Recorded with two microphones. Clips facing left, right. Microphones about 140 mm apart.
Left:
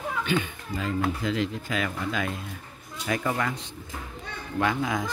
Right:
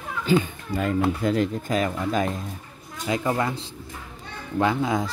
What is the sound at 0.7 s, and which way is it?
Speech, 55° right (ahead or behind).